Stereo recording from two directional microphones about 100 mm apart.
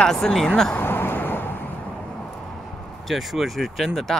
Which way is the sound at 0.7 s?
20° left (ahead or behind).